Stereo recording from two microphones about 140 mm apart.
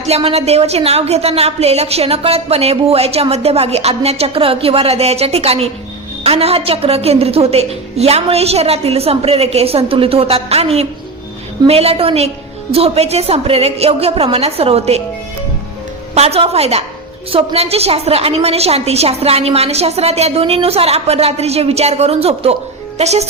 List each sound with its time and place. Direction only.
0.0 s a woman's voice: 45° right (ahead or behind)
16.1 s a woman's voice: 45° right (ahead or behind)